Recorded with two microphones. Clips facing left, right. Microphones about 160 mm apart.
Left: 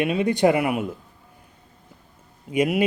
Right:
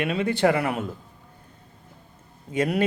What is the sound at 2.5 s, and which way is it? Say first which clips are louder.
Speech: left 2 dB; 10° left (ahead or behind).